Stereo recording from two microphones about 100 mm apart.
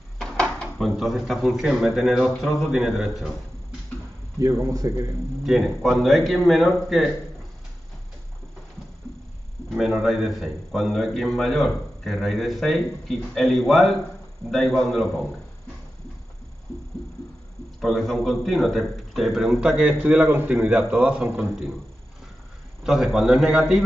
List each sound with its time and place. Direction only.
0.2 s speech: 5° left (ahead or behind)
4.4 s speech: 35° right (ahead or behind)
5.4 s a man's voice: centre (ahead or behind)
9.7 s a man's voice: centre (ahead or behind)
17.7 s a man's voice: centre (ahead or behind)
22.8 s a man's voice: centre (ahead or behind)